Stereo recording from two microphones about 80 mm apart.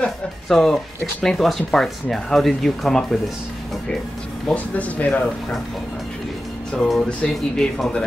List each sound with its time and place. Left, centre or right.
0.0 s speech: centre
4.5 s speech: centre
7.0 s speech: centre